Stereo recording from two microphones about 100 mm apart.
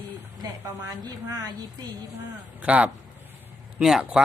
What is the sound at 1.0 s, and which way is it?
Speech, 40° right (ahead or behind).